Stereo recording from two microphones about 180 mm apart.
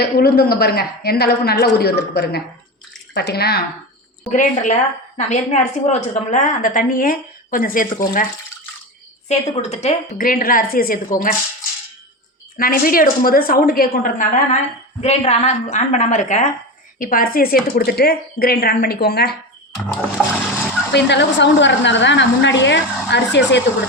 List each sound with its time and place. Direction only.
0.0 s a woman's voice: 60° left (ahead or behind)
4.3 s a woman's voice: 45° left (ahead or behind)
9.3 s a woman's voice: 40° left (ahead or behind)
12.5 s a woman's voice: 55° left (ahead or behind)
15.0 s a woman's voice: 35° left (ahead or behind); by 19.4 s 65° left (ahead or behind)
20.9 s speech: 70° left (ahead or behind)